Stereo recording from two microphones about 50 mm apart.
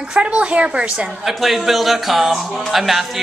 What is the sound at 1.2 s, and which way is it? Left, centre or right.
A man's voice, centre.